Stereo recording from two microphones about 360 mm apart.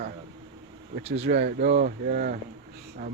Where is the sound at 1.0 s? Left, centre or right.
Centre.